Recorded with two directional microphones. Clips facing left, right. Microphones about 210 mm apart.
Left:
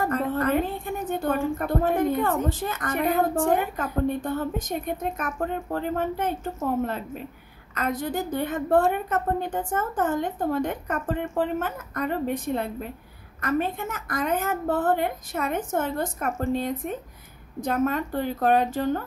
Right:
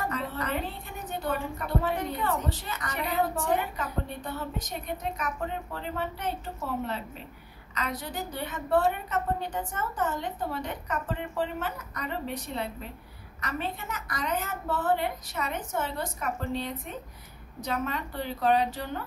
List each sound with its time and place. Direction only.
0.0 s a woman's voice: 50° left (ahead or behind)